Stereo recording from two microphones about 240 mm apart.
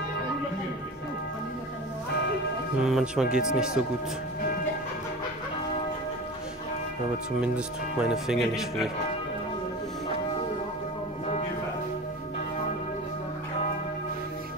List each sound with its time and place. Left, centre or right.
2.8 s speech: centre
7.3 s speech: centre